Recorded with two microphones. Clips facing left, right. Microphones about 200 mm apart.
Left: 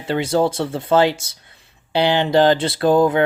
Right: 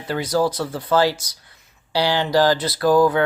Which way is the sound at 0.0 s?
25° left (ahead or behind).